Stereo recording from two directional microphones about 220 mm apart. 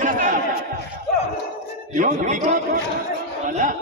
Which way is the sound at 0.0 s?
35° right (ahead or behind).